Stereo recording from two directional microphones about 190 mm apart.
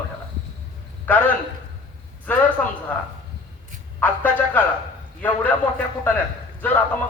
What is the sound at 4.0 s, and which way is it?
A man's voice, 10° left (ahead or behind).